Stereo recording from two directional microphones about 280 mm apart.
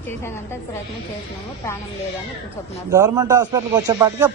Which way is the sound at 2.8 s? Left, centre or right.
Centre.